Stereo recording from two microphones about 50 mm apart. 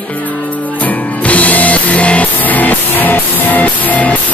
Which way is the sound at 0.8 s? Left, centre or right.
Left.